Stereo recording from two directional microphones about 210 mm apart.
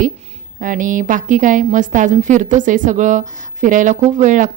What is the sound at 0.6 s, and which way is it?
A woman's voice, 40° right (ahead or behind).